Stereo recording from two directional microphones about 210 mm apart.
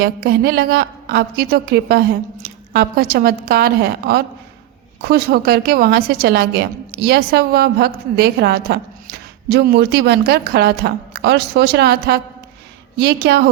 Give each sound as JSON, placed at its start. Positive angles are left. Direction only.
{"t": 0.0, "sound": "a woman's voice", "side_deg": -45}